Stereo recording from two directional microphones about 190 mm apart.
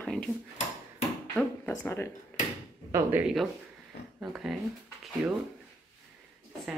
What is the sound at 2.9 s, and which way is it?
Speech, 10° right (ahead or behind).